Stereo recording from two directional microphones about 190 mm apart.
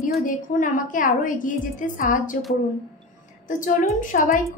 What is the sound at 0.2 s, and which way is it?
A woman's voice, 45° left (ahead or behind).